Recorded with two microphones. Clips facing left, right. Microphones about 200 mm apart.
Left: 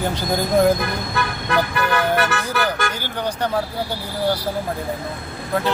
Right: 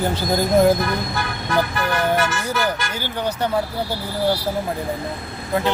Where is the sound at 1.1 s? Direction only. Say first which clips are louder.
Left 4 dB; 60° left (ahead or behind).